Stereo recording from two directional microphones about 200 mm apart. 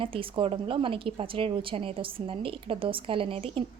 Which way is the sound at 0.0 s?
25° right (ahead or behind).